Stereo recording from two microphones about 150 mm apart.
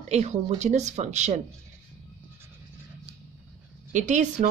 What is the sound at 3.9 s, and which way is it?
Speech, 55° right (ahead or behind).